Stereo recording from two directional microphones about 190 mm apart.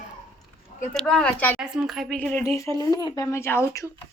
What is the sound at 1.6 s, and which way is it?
Speech, 5° right (ahead or behind).